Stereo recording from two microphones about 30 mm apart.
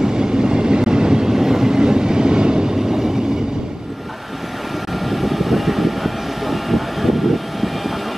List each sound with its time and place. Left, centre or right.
0.0 s train: right
5.1 s vehicle: centre